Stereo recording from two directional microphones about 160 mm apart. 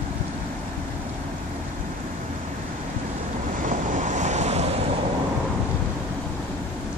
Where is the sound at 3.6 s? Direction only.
50° right (ahead or behind).